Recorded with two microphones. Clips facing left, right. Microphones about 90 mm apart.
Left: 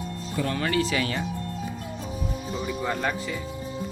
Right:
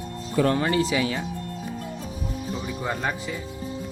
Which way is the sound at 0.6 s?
25° right (ahead or behind).